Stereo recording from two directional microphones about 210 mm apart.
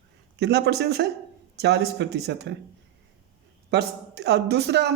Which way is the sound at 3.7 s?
55° right (ahead or behind).